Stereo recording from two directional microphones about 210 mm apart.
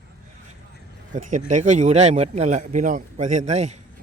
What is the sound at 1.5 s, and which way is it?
A man's voice, 35° right (ahead or behind).